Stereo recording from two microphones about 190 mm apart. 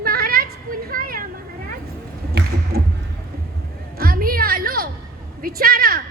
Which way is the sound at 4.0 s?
50° right (ahead or behind).